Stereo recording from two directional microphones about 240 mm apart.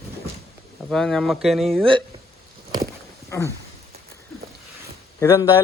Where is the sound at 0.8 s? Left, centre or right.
Centre.